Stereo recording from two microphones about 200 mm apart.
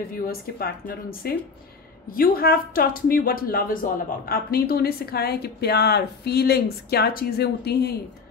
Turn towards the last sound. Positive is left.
turn(degrees=55)  # may be behind; listen again after turning